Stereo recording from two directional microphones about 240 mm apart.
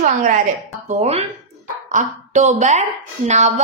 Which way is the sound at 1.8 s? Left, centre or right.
Right.